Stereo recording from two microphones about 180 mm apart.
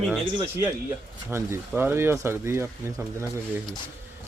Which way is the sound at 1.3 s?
15° right (ahead or behind).